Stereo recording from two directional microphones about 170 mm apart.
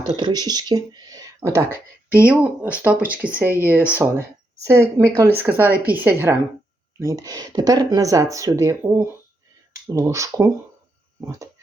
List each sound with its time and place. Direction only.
0.2 s speech: 25° right (ahead or behind)